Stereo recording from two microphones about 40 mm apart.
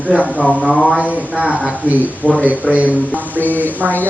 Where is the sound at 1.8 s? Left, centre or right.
Right.